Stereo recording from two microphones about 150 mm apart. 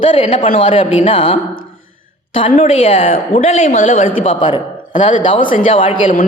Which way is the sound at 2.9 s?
60° left (ahead or behind).